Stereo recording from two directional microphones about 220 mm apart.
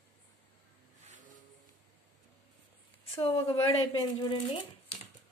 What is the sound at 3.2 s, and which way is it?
Speech, 25° left (ahead or behind).